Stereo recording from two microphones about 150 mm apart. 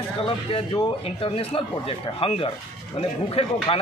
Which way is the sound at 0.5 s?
35° left (ahead or behind).